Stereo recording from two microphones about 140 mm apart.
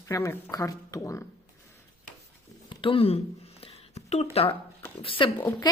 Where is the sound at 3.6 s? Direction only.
45° left (ahead or behind).